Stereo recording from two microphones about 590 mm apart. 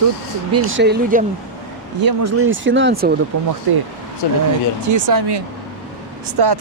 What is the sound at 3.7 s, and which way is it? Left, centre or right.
Speech, right.